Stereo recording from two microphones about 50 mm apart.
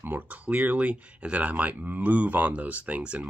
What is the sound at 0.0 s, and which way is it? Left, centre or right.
Speech, right.